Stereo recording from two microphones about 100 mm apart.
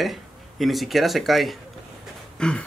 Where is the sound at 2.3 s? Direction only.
10° left (ahead or behind).